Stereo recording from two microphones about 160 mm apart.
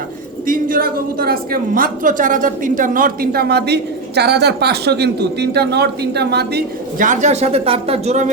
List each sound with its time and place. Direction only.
0.4 s a woman's voice: 60° right (ahead or behind); by 6.6 s 90° right
7.0 s speech: 50° right (ahead or behind)